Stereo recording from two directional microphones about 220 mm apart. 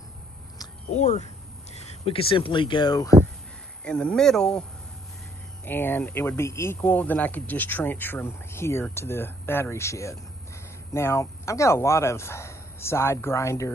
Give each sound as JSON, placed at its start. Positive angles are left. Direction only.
{"t": 0.9, "sound": "speech", "side_deg": 30}
{"t": 3.8, "sound": "speech", "side_deg": 5}
{"t": 5.7, "sound": "speech", "side_deg": 10}